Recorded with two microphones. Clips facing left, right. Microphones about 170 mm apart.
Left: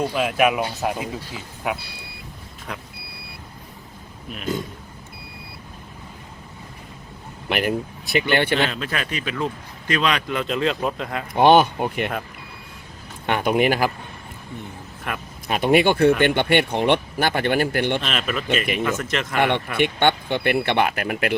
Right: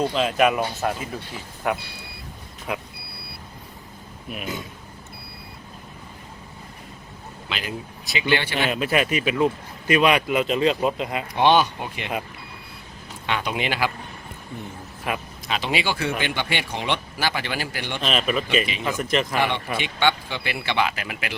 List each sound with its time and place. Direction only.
0.0 s speech: 10° left (ahead or behind)
2.7 s speech: 10° right (ahead or behind)
7.5 s speech: 55° left (ahead or behind)
8.5 s speech: 10° right (ahead or behind)
11.3 s speech: 50° left (ahead or behind)
13.2 s speech: 50° left (ahead or behind)
15.1 s speech: 5° right (ahead or behind)
15.4 s speech: 50° left (ahead or behind)
18.0 s speech: centre (ahead or behind)
18.4 s speech: 55° left (ahead or behind)
19.1 s speech: centre (ahead or behind)
19.4 s speech: 55° left (ahead or behind)